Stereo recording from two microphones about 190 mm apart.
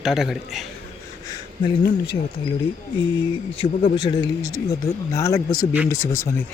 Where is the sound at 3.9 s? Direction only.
20° left (ahead or behind).